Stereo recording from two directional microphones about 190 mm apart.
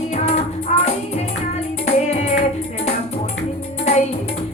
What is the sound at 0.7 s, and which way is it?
Music, 35° left (ahead or behind).